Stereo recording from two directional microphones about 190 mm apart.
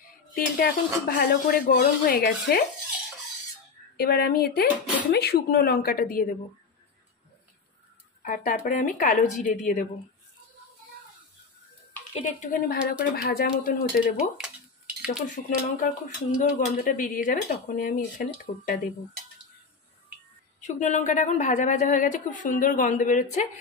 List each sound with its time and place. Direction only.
0.3 s speech: 50° left (ahead or behind)
3.9 s speech: 55° left (ahead or behind)
8.2 s speech: 45° left (ahead or behind)
12.1 s speech: 45° left (ahead or behind)
14.1 s a sound: 5° right (ahead or behind)
15.2 s speech: 45° left (ahead or behind)
20.6 s a woman's voice: 40° left (ahead or behind)